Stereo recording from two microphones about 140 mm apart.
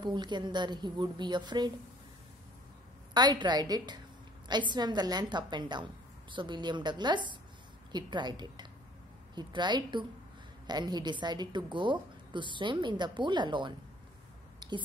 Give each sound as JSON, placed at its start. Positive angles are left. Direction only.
{"t": 0.0, "sound": "a woman's voice", "side_deg": -30}
{"t": 3.2, "sound": "a woman's voice", "side_deg": -30}
{"t": 14.6, "sound": "a sound", "side_deg": -30}